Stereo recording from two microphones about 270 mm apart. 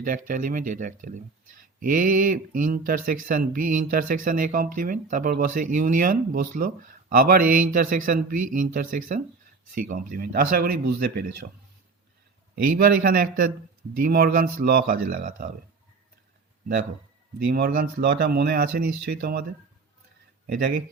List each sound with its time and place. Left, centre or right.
0.0 s speech: right
12.7 s speech: right
17.4 s speech: right